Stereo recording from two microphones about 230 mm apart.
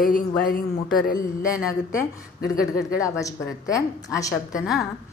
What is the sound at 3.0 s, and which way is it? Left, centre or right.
A woman's voice, centre.